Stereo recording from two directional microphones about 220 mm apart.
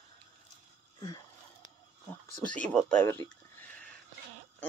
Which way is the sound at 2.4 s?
5° left (ahead or behind).